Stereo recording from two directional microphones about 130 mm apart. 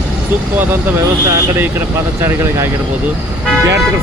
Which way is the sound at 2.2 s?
20° right (ahead or behind).